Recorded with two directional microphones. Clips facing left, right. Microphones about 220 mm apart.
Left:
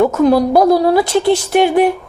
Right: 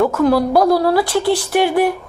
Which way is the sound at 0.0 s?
20° left (ahead or behind).